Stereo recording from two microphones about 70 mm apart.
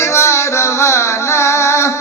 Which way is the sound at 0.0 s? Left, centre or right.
Left.